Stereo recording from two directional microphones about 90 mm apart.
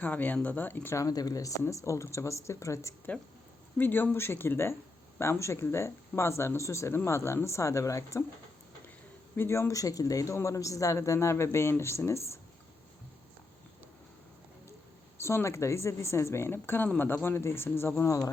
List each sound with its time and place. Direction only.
0.0 s speech: 20° left (ahead or behind)
0.9 s speech: 40° left (ahead or behind)
3.8 s speech: 20° left (ahead or behind)
9.3 s speech: 30° left (ahead or behind)
15.2 s speech: 30° left (ahead or behind)